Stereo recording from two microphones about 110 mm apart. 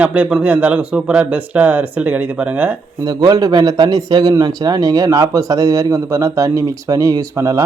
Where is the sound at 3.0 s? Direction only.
40° right (ahead or behind).